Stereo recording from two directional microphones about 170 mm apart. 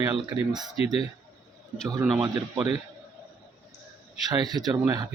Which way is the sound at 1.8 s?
20° right (ahead or behind).